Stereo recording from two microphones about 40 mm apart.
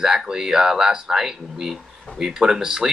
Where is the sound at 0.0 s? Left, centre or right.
Centre.